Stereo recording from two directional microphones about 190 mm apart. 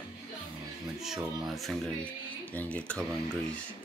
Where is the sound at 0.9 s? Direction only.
Centre (ahead or behind).